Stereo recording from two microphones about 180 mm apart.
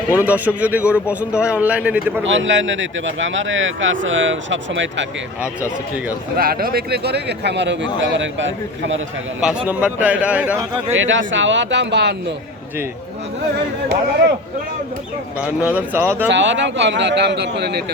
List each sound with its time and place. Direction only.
0.1 s a man's voice: 10° right (ahead or behind)
2.2 s speech: 90° right
6.3 s speech: 55° right (ahead or behind); by 9.0 s 90° right
9.4 s a man's voice: 5° right (ahead or behind)
10.9 s speech: 90° right; by 12.1 s 70° right (ahead or behind)
15.4 s a man's voice: 5° right (ahead or behind)
16.3 s speech: 85° right; by 17.8 s 65° right (ahead or behind)